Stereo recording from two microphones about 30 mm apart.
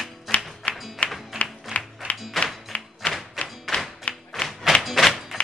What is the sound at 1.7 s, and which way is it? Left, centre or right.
Music, right.